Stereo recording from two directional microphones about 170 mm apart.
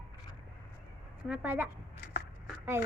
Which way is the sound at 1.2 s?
10° right (ahead or behind).